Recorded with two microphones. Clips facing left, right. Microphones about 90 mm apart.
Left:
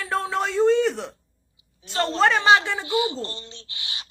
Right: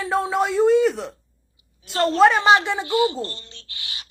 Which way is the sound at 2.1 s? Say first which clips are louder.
Right 3 dB; 15° right (ahead or behind).